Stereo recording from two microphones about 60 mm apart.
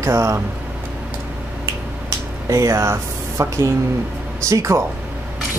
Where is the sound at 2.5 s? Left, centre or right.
Right.